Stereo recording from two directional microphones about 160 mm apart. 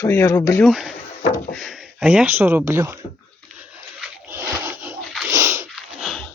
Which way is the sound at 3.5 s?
10° right (ahead or behind).